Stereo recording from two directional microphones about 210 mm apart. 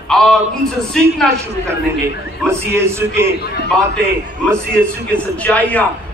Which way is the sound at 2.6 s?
10° right (ahead or behind).